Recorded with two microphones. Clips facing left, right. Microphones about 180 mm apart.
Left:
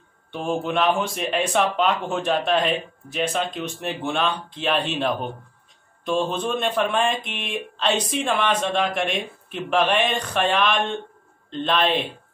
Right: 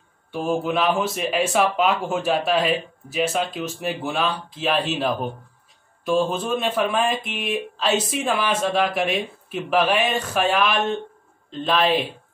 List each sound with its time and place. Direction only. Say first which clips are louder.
0.3 s speech: right 2 dB; 5° right (ahead or behind)